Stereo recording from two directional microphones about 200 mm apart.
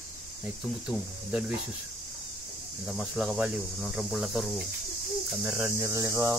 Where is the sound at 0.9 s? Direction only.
5° right (ahead or behind).